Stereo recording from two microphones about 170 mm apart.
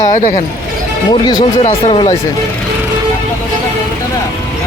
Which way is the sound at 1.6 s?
35° left (ahead or behind).